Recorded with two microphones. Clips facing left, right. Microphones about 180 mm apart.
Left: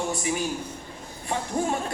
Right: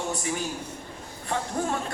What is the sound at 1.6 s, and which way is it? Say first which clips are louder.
Speech: left 3 dB; 15° left (ahead or behind).